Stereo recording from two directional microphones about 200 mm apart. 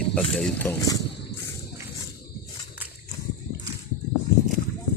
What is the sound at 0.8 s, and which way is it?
Speech, 20° left (ahead or behind).